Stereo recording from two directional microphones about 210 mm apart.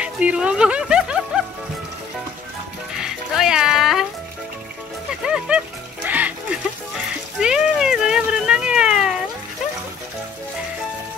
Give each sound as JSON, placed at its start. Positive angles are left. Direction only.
{"t": 0.0, "sound": "a sound", "side_deg": -5}
{"t": 3.0, "sound": "music", "side_deg": -5}
{"t": 5.2, "sound": "music", "side_deg": -5}
{"t": 7.3, "sound": "cat", "side_deg": -5}